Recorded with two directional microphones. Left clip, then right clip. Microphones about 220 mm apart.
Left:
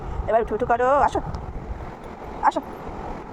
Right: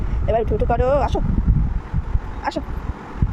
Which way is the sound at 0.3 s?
20° right (ahead or behind).